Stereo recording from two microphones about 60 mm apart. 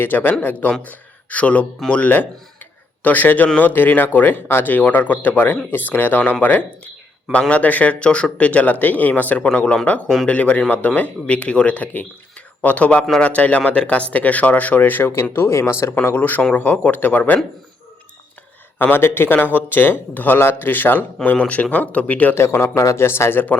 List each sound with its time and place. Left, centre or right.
0.0 s speech: left
16.1 s speech: left
18.8 s speech: left
22.4 s a man's voice: left